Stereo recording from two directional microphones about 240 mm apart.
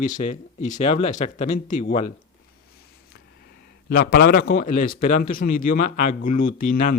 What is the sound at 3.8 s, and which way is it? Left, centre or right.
Speech, left.